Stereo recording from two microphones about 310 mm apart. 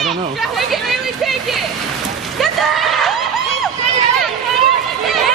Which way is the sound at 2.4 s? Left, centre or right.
Centre.